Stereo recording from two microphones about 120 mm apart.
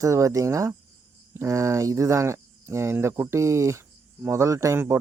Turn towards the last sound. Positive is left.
turn(degrees=-20)  # may be behind; listen again after turning